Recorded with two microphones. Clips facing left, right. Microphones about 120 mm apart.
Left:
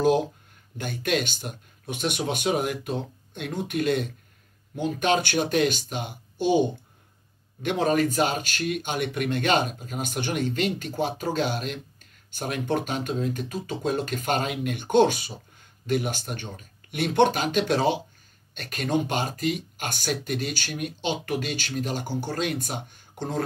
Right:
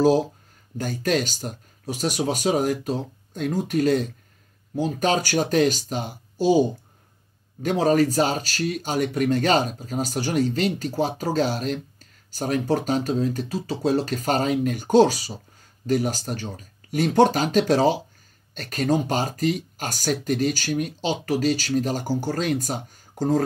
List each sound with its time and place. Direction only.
0.0 s speech: 35° right (ahead or behind)